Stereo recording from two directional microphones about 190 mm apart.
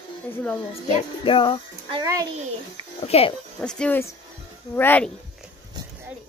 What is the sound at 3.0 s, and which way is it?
Speech, 30° left (ahead or behind).